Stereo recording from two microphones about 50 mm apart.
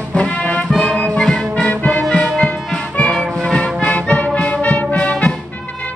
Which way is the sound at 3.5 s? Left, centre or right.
Left.